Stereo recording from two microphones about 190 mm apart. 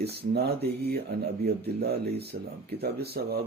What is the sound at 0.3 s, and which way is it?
Speech, 60° right (ahead or behind).